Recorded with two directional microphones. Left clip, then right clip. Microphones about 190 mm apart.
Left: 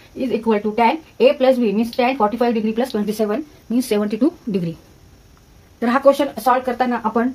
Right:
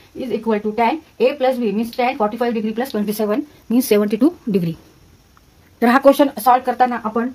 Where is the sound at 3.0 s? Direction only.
45° right (ahead or behind).